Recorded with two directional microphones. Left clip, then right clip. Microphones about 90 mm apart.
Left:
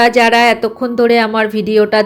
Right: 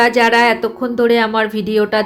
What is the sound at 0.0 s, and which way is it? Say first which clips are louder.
Speech: left 2 dB; 45° left (ahead or behind).